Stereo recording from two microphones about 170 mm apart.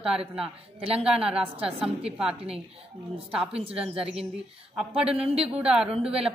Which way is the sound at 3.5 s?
35° right (ahead or behind).